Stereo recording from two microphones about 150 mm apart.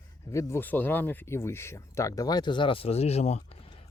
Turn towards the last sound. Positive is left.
turn(degrees=45)  # may be behind; listen again after turning